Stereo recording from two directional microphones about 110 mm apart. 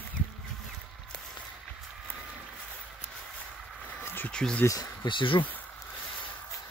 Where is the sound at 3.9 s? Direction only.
20° left (ahead or behind).